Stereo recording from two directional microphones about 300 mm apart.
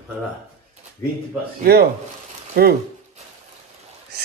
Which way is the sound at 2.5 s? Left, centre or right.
Right.